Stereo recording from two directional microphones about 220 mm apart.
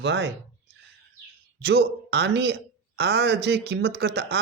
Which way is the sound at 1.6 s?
50° right (ahead or behind).